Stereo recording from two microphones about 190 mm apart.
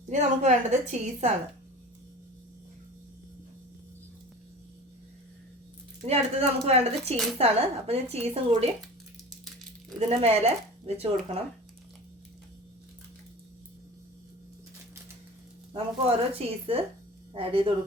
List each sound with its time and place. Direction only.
0.1 s speech: 35° right (ahead or behind)
6.1 s speech: 30° right (ahead or behind)
10.1 s speech: 30° right (ahead or behind)
15.7 s speech: 30° right (ahead or behind)